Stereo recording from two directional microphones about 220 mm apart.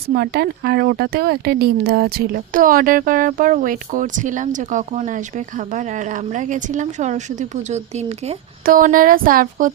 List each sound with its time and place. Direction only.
0.1 s speech: 45° right (ahead or behind)